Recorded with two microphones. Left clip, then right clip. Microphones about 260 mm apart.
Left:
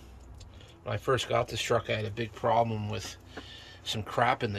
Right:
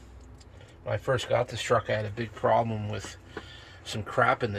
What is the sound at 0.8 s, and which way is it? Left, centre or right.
Speech, centre.